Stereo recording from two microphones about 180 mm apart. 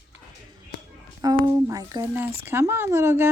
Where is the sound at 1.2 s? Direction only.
20° right (ahead or behind).